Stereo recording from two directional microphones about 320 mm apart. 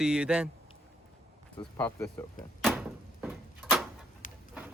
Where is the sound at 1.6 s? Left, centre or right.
Centre.